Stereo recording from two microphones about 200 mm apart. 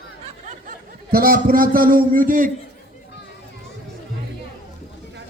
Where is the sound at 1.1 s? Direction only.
45° right (ahead or behind).